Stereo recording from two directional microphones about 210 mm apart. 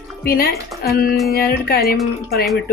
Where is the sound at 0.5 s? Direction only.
Centre (ahead or behind).